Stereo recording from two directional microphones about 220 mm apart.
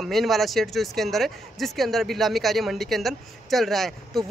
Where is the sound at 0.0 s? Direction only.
Centre (ahead or behind).